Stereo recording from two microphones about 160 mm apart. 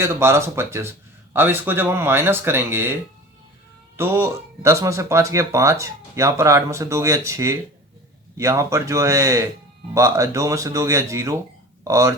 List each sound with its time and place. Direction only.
0.0 s speech: 15° right (ahead or behind)
3.9 s speech: 15° right (ahead or behind)